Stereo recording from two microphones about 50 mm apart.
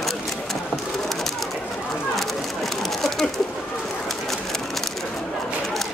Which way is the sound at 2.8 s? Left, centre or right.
Centre.